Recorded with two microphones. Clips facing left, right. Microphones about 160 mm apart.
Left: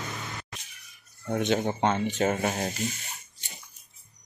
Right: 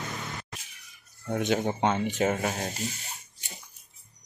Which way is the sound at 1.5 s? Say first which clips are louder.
Even; 10° right (ahead or behind).